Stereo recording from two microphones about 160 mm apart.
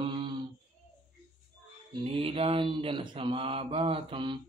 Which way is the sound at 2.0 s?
35° right (ahead or behind).